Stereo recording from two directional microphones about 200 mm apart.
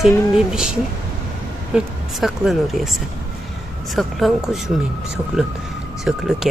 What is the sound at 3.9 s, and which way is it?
Speech, centre (ahead or behind).